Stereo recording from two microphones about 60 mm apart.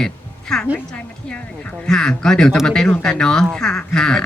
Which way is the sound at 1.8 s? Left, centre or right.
Centre.